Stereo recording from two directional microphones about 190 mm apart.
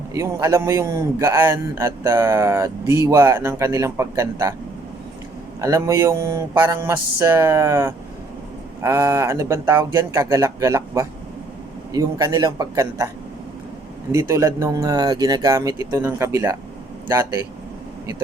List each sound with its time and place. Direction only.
0.1 s a man's voice: 15° right (ahead or behind)
5.5 s a man's voice: 15° right (ahead or behind)
14.1 s a man's voice: 15° right (ahead or behind)